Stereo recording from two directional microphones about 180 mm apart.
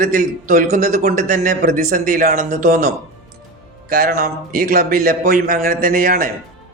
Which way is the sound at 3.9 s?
55° right (ahead or behind).